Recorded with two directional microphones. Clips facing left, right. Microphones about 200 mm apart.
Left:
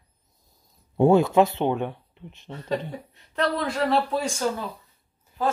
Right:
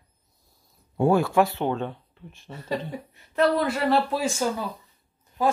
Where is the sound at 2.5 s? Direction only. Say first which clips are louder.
Left 1 dB; 10° right (ahead or behind).